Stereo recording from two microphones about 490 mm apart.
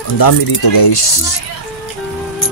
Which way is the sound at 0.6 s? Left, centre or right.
Left.